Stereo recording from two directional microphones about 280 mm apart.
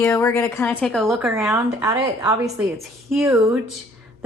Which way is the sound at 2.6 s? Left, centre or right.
Centre.